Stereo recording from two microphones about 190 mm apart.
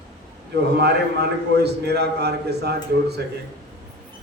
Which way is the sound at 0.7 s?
60° right (ahead or behind).